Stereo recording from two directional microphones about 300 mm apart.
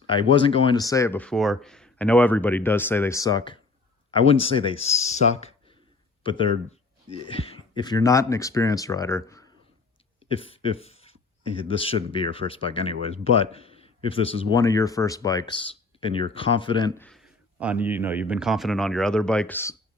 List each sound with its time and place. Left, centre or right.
0.1 s speech: centre